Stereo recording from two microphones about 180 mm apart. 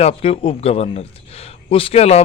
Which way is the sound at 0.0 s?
35° left (ahead or behind).